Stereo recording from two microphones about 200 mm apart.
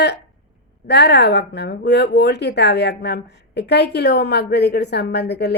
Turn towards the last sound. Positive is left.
turn(degrees=55)  # may be behind; listen again after turning